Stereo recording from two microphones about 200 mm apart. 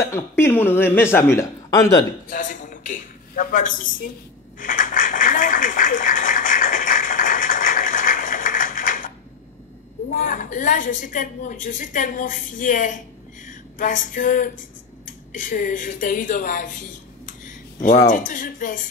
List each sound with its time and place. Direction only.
0.0 s speech: 15° left (ahead or behind)
2.2 s a woman's voice: 40° left (ahead or behind)
4.6 s a sound: 40° left (ahead or behind)
10.1 s a woman's voice: 40° left (ahead or behind)
13.5 s a sound: 40° left (ahead or behind)
15.3 s a woman's voice: 40° left (ahead or behind)